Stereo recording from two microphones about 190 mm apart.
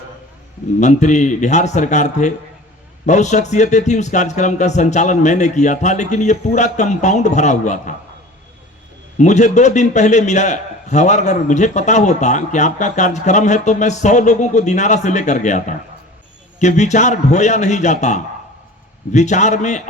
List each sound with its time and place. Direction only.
0.8 s a man's voice: 40° left (ahead or behind)
9.1 s a man's voice: 40° left (ahead or behind)